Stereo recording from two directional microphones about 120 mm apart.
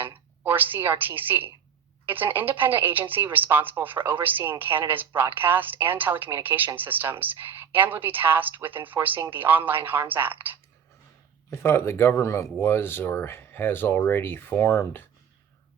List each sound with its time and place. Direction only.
0.0 s a woman's voice: 15° right (ahead or behind)
11.5 s speech: 20° left (ahead or behind)